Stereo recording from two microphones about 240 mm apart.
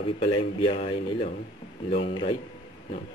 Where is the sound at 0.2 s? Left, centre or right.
Left.